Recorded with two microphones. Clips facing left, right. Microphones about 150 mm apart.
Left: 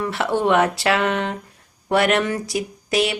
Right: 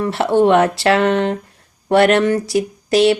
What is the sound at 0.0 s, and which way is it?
Speech, 30° right (ahead or behind).